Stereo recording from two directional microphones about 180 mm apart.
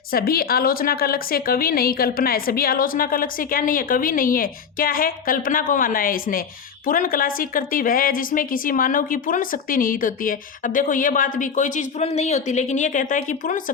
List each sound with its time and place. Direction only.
0.1 s speech: 55° left (ahead or behind)